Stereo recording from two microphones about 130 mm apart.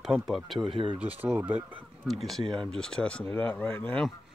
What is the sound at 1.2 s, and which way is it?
Speech, 15° right (ahead or behind).